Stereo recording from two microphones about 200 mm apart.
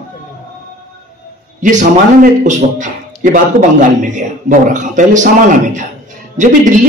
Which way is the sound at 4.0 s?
40° right (ahead or behind).